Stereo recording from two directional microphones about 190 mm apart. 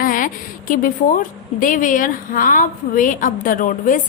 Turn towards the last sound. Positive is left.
turn(degrees=45)  # may be behind; listen again after turning